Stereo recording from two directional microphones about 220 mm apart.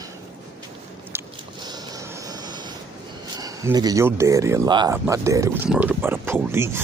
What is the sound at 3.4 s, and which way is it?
Speech, 15° right (ahead or behind).